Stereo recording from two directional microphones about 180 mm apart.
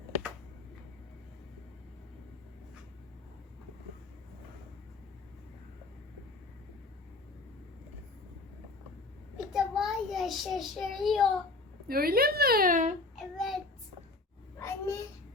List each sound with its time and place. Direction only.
9.5 s child singing: 5° right (ahead or behind)
11.9 s a child's voice: 55° right (ahead or behind)
13.1 s child singing: centre (ahead or behind)
14.6 s babbling: 15° left (ahead or behind)